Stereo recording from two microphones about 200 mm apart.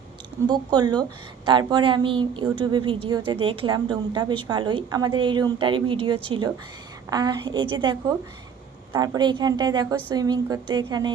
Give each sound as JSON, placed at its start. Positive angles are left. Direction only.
{"t": 0.4, "sound": "a woman's voice", "side_deg": -20}